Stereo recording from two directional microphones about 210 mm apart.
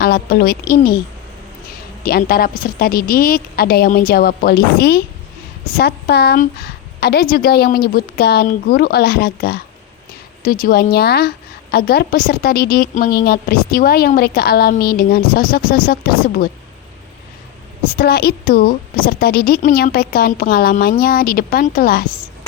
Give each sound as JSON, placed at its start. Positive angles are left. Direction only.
{"t": 0.0, "sound": "a woman's voice", "side_deg": 45}
{"t": 2.0, "sound": "a woman's voice", "side_deg": 45}
{"t": 17.9, "sound": "a woman's voice", "side_deg": 50}